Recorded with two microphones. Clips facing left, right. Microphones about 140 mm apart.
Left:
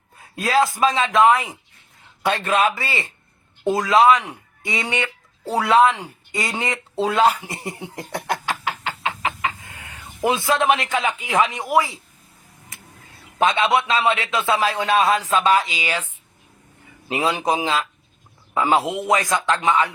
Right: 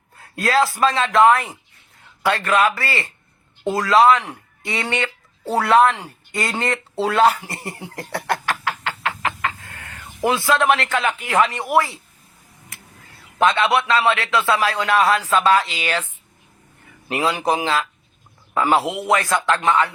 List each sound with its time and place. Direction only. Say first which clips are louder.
0.2 s a man's voice: even; 15° left (ahead or behind)
9.6 s chicken: right 1 dB; 15° left (ahead or behind)
10.2 s a man's voice: right 1 dB; 20° left (ahead or behind)
13.4 s a man's voice: right 1 dB; 20° left (ahead or behind)